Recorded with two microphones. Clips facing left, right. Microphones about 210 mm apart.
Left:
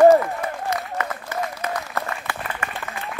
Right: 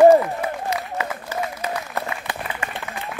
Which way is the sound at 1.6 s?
15° right (ahead or behind).